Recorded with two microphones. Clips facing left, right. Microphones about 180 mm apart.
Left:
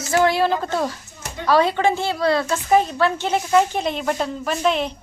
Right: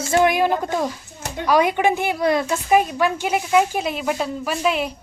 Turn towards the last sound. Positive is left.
turn(degrees=-5)  # may be behind; listen again after turning